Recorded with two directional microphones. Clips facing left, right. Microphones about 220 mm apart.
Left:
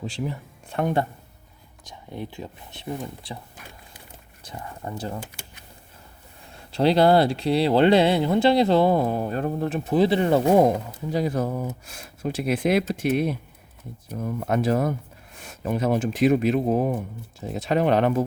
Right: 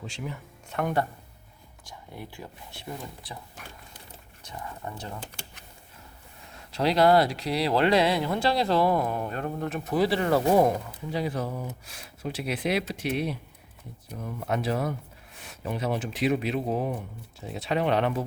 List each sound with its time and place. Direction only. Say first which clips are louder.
0.0 s speech: left 7 dB; 35° left (ahead or behind)
4.4 s speech: left 3 dB; 35° left (ahead or behind)
6.7 s speech: left 3 dB; 30° left (ahead or behind)
11.1 s speech: left 5 dB; 45° left (ahead or behind)